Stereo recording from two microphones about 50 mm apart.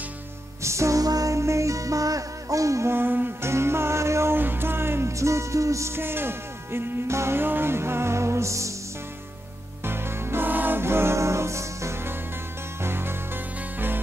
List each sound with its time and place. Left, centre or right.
0.6 s music: right
2.9 s music: right
3.4 s music: right
4.4 s music: right
5.2 s music: right
5.9 s music: right
7.3 s music: right
9.8 s music: right
10.8 s music: right
12.8 s music: right